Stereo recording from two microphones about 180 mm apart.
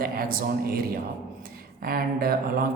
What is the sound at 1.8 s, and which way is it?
Speech, 55° right (ahead or behind).